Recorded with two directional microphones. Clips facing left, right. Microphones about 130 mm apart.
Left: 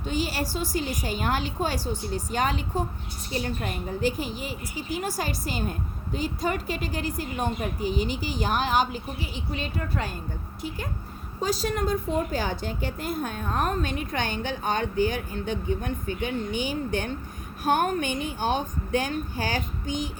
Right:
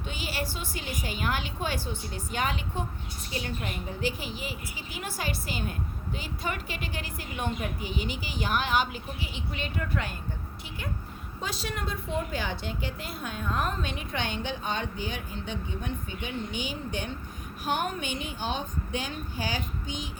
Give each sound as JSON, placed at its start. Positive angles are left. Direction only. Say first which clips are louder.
{"t": 0.1, "sound": "a woman's voice", "louder": "left 7 dB", "side_deg": 40}
{"t": 11.3, "sound": "a woman's voice", "louder": "left 8 dB", "side_deg": 40}